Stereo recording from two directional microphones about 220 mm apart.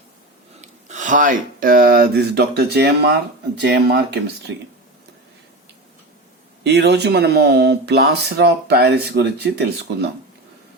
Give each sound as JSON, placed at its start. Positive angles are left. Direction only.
{"t": 0.6, "sound": "speech", "side_deg": -35}
{"t": 6.7, "sound": "speech", "side_deg": -50}